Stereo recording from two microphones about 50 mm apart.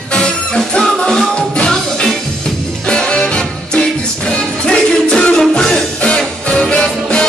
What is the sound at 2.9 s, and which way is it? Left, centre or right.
Music, centre.